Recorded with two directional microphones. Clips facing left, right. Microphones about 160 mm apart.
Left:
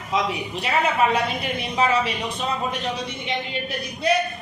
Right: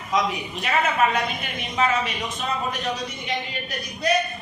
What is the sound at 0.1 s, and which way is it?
Speech, 30° left (ahead or behind).